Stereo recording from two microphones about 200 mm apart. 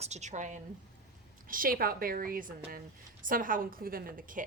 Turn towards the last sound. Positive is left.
turn(degrees=-45)  # may be behind; listen again after turning